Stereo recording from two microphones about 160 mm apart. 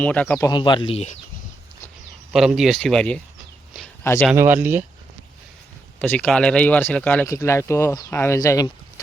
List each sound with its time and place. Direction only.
0.0 s speech: 10° left (ahead or behind)
0.3 s speech: 25° left (ahead or behind)
2.3 s speech: centre (ahead or behind); by 4.3 s 15° left (ahead or behind)
4.4 s speech: 15° right (ahead or behind)
6.0 s speech: 10° left (ahead or behind); by 8.7 s 25° left (ahead or behind)